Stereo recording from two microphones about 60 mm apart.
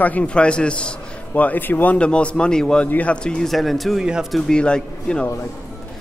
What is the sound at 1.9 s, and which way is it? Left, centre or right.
Speech, centre.